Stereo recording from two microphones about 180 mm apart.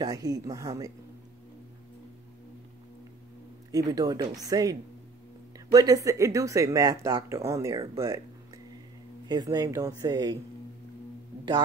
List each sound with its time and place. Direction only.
0.0 s speech: 20° right (ahead or behind)
3.7 s speech: 20° right (ahead or behind)
9.3 s speech: 20° right (ahead or behind)